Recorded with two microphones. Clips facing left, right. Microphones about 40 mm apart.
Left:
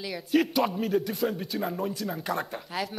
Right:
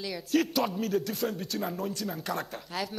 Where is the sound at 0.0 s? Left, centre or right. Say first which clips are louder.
Left 2 dB; centre.